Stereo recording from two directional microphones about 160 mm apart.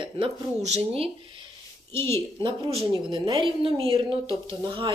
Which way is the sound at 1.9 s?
15° left (ahead or behind).